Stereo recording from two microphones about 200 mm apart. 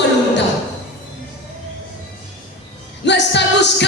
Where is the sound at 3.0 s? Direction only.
60° left (ahead or behind).